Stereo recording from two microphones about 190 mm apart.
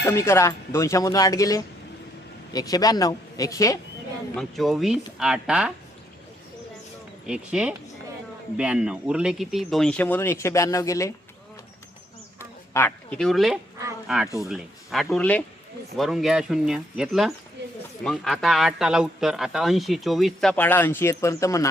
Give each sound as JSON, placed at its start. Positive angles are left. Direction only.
{"t": 0.0, "sound": "speech", "side_deg": 15}
{"t": 4.4, "sound": "speech", "side_deg": 0}
{"t": 7.3, "sound": "speech", "side_deg": -5}
{"t": 12.4, "sound": "a sound", "side_deg": 10}
{"t": 14.3, "sound": "speech", "side_deg": 0}
{"t": 17.6, "sound": "speech", "side_deg": -65}
{"t": 18.0, "sound": "speech", "side_deg": 0}